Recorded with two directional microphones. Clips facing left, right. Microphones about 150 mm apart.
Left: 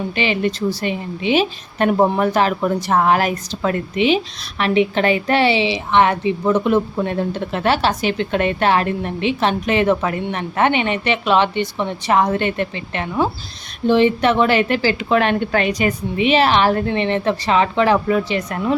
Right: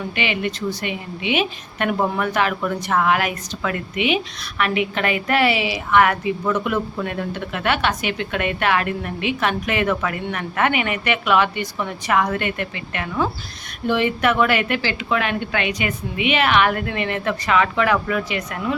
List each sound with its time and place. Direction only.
0.2 s a woman's voice: 35° left (ahead or behind)